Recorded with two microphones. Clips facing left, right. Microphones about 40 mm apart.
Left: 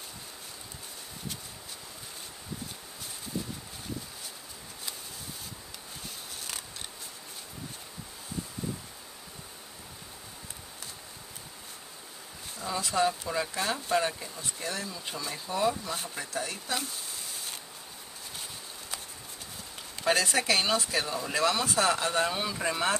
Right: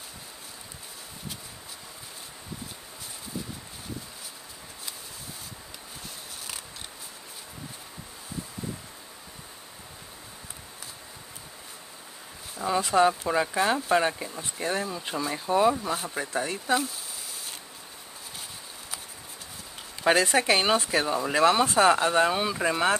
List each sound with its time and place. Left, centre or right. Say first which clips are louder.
12.5 s speech: right 6 dB; centre
20.0 s speech: right 5 dB; centre